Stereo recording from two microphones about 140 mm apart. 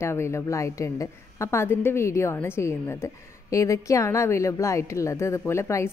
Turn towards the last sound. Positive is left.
turn(degrees=20)  # may be behind; listen again after turning